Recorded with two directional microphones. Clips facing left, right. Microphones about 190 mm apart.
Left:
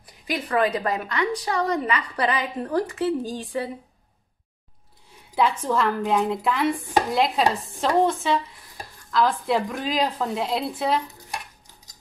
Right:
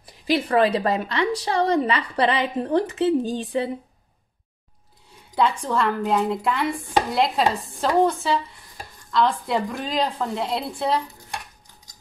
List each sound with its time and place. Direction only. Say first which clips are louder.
0.3 s a woman's voice: right 4 dB; 30° right (ahead or behind)
5.3 s a woman's voice: even; 5° left (ahead or behind)